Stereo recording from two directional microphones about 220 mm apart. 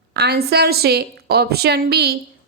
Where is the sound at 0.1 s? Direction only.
50° right (ahead or behind).